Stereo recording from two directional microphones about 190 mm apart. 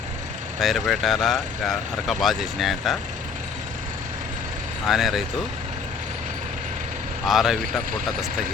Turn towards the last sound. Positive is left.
turn(degrees=0)  # may be behind; listen again after turning